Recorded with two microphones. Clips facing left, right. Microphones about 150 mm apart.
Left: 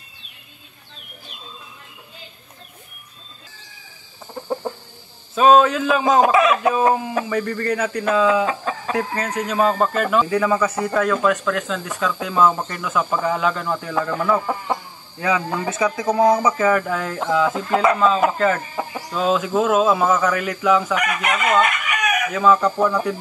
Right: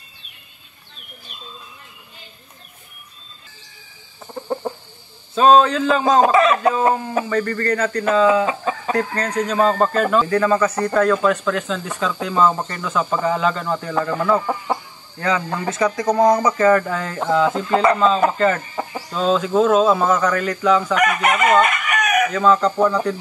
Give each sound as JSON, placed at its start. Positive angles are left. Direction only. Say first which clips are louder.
{"t": 4.6, "sound": "chicken", "louder": "right 1 dB", "side_deg": 0}
{"t": 5.3, "sound": "speech", "louder": "even", "side_deg": 5}
{"t": 8.5, "sound": "chicken", "louder": "right 2 dB", "side_deg": -5}
{"t": 8.9, "sound": "speech", "louder": "right 2 dB", "side_deg": 5}
{"t": 20.9, "sound": "chicken", "louder": "right 4 dB", "side_deg": -45}
{"t": 22.3, "sound": "speech", "louder": "left 3 dB", "side_deg": 5}